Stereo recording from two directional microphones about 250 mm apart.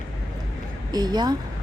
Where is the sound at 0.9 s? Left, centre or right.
Centre.